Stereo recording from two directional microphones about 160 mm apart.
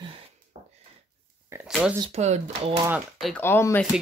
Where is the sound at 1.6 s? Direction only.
5° right (ahead or behind).